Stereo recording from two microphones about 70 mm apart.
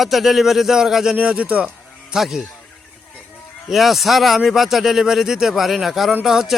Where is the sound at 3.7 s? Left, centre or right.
Centre.